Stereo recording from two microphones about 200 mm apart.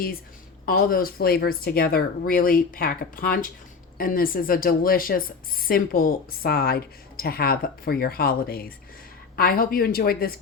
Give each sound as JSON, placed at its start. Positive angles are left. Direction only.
{"t": 0.6, "sound": "a woman's voice", "side_deg": 45}